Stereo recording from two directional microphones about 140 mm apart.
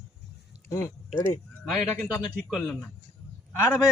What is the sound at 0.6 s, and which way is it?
Speech, 20° left (ahead or behind).